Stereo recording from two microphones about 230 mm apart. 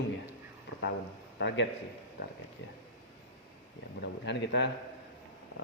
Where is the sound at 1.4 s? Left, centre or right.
Left.